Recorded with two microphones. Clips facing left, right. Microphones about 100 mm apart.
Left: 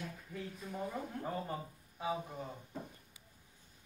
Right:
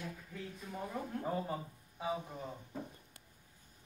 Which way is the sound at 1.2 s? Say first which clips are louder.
Right 3 dB; 5° right (ahead or behind).